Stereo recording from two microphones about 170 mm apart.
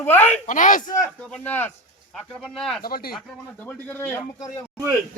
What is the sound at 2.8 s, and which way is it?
Speech, 60° left (ahead or behind).